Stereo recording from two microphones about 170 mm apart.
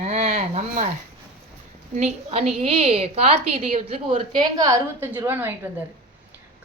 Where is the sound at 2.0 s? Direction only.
40° right (ahead or behind).